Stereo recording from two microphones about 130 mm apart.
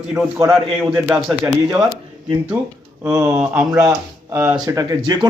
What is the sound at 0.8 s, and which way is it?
Speech, 35° right (ahead or behind).